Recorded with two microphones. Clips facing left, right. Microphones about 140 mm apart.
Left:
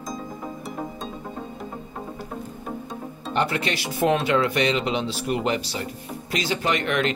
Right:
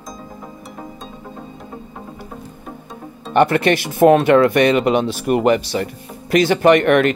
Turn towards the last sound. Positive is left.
turn(degrees=-60)  # may be behind; listen again after turning